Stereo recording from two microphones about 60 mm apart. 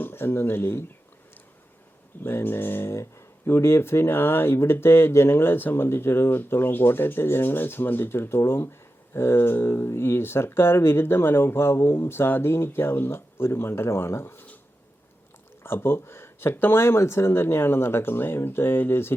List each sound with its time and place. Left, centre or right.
0.0 s speech: left
2.2 s speech: left
15.6 s speech: left